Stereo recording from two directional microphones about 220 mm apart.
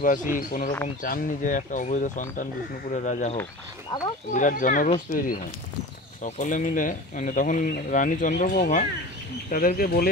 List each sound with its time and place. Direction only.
0.0 s speech: 35° left (ahead or behind)
3.9 s speech: 20° left (ahead or behind)
4.3 s speech: 35° left (ahead or behind)